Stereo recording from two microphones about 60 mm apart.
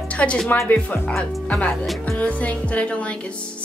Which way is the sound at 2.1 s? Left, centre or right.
Left.